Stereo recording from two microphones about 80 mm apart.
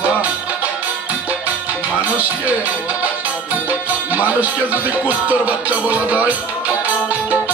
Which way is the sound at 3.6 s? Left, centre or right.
Centre.